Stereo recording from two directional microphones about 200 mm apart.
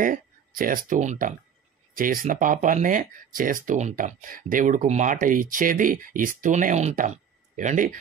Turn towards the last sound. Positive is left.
turn(degrees=-40)  # may be behind; listen again after turning